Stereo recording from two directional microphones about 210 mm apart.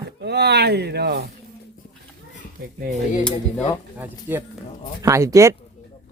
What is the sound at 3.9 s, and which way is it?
Speech, 10° right (ahead or behind).